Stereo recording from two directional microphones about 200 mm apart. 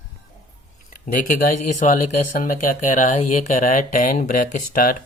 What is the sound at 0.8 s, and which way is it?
Speech, 40° left (ahead or behind).